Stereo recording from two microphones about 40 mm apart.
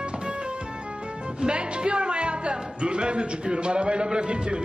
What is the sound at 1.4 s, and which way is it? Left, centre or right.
Music, right.